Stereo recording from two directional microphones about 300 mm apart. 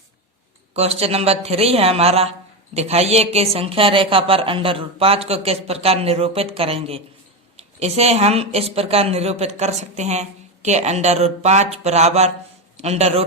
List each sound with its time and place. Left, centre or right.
0.7 s a man's voice: right